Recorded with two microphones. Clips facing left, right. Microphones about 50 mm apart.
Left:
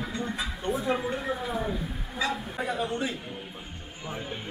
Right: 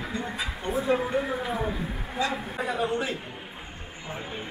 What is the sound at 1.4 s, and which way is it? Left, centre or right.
Speech, right.